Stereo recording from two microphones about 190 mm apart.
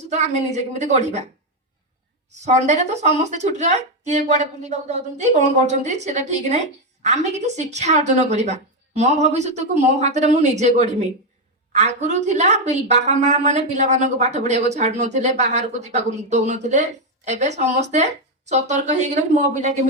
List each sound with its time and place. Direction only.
0.0 s speech: 35° right (ahead or behind)
2.3 s speech: 35° right (ahead or behind)